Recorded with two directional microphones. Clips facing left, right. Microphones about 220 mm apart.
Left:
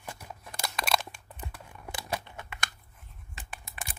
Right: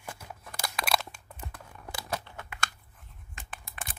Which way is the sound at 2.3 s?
15° left (ahead or behind).